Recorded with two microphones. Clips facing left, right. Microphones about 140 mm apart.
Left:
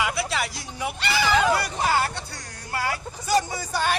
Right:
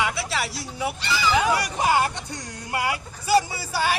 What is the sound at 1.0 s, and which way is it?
Speech, 65° left (ahead or behind).